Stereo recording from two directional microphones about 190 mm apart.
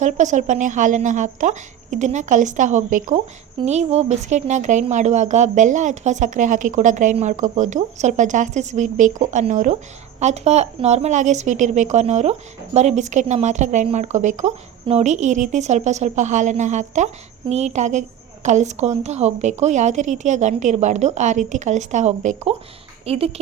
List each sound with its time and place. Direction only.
0.0 s a woman's voice: 40° right (ahead or behind)